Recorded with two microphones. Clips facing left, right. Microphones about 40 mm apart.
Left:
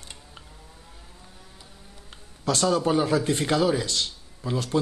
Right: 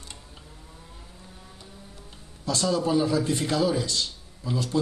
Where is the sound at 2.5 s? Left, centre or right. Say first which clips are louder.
Left 2 dB; left.